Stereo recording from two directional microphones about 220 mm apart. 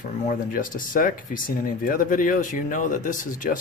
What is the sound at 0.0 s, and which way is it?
Speech, 40° left (ahead or behind).